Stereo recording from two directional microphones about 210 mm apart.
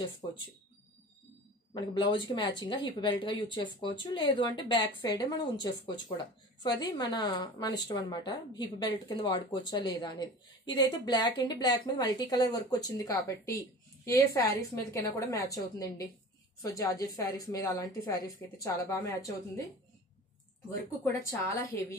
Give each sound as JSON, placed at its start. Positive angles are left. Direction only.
{"t": 0.0, "sound": "speech", "side_deg": 20}
{"t": 1.7, "sound": "a woman's voice", "side_deg": 20}
{"t": 21.3, "sound": "a woman's voice", "side_deg": 15}